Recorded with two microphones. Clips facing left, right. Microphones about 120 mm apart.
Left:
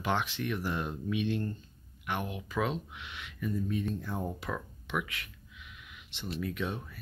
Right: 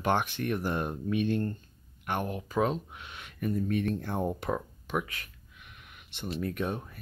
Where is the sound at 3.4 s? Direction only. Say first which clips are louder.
Right 4 dB; 65° right (ahead or behind).